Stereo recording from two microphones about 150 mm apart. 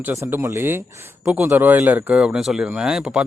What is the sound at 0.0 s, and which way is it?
A man's voice, 15° right (ahead or behind).